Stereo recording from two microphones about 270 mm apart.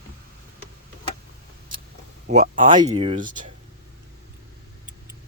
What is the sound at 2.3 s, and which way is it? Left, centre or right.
Speech, right.